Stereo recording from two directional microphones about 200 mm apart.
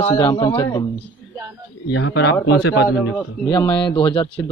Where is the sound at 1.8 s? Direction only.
65° left (ahead or behind).